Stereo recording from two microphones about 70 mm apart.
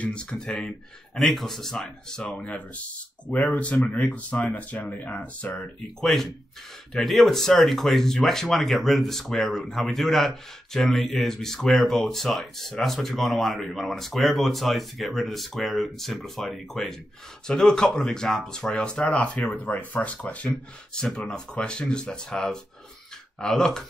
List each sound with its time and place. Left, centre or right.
0.0 s speech: centre
2.2 s speech: centre
5.9 s speech: centre